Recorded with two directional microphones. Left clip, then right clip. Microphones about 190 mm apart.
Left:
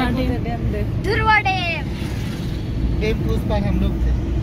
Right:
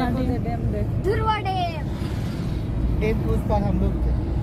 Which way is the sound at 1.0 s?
50° right (ahead or behind).